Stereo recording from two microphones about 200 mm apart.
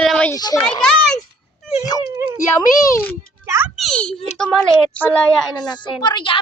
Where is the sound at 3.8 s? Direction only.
5° left (ahead or behind).